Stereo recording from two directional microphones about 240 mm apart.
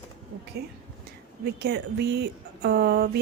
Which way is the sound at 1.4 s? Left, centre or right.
Right.